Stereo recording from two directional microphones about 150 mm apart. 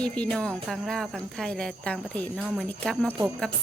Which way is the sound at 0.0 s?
5° left (ahead or behind).